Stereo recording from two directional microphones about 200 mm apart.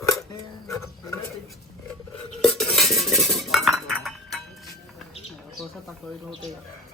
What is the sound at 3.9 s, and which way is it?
Chink, centre (ahead or behind).